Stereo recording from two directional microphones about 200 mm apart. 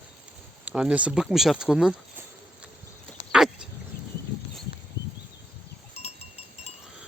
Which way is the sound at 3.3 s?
5° right (ahead or behind).